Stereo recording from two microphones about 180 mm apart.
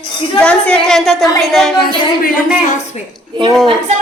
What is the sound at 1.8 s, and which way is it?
A woman's voice, 50° left (ahead or behind).